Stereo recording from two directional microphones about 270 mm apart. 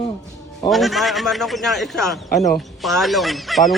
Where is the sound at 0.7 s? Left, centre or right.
Centre.